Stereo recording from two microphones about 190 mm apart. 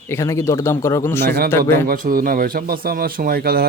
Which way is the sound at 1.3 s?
55° right (ahead or behind).